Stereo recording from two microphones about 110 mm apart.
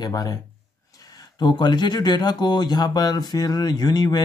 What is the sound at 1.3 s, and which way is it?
Speech, 40° left (ahead or behind).